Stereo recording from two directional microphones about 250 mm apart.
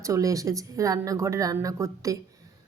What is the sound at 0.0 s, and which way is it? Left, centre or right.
A woman's voice, centre.